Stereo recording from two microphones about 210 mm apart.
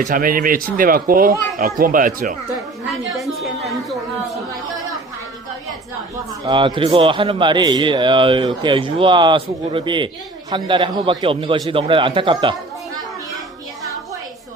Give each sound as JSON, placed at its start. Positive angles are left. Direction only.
{"t": 0.0, "sound": "speech", "side_deg": -40}
{"t": 3.2, "sound": "a woman's voice", "side_deg": 0}
{"t": 6.4, "sound": "a man's voice", "side_deg": -20}